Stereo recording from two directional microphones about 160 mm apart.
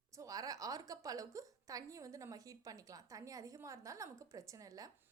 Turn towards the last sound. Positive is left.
turn(degrees=-20)  # may be behind; listen again after turning